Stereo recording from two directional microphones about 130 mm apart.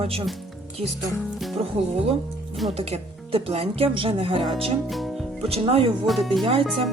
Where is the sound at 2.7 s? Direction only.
50° right (ahead or behind).